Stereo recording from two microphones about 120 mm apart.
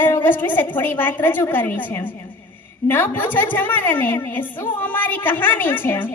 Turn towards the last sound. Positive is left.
turn(degrees=15)  # may be behind; listen again after turning